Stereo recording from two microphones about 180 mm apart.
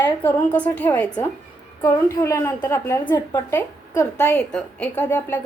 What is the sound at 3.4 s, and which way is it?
A woman's voice, 10° left (ahead or behind).